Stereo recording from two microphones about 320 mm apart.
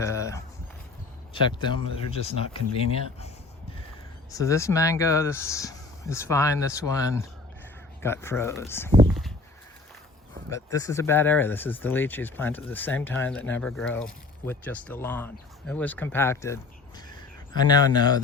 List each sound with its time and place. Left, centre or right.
0.0 s a sound: centre
1.3 s speech: centre
10.5 s speech: centre